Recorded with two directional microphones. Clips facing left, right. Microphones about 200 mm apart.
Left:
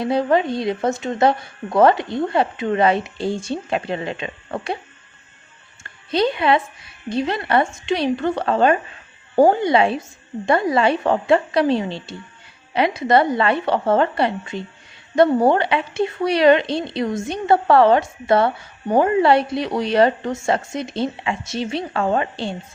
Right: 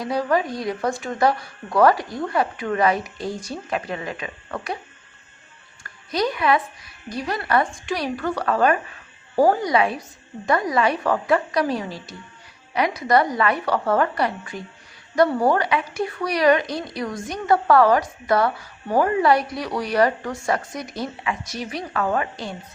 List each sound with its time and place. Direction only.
0.0 s speech: 25° left (ahead or behind)
5.8 s speech: 25° left (ahead or behind)